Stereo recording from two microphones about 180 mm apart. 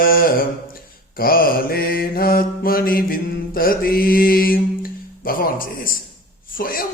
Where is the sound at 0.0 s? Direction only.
55° left (ahead or behind).